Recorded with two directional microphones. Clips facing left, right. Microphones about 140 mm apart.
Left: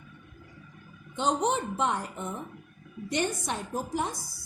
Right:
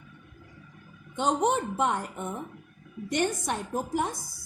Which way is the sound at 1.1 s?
50° right (ahead or behind).